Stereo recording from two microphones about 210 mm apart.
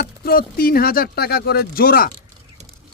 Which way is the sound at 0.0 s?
45° left (ahead or behind).